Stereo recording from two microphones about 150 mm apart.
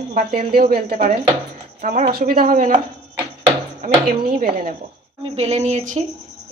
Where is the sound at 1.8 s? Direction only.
60° right (ahead or behind).